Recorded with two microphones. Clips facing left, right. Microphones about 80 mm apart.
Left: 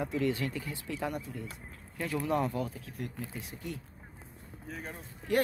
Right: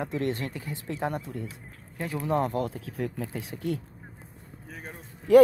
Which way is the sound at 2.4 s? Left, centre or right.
Right.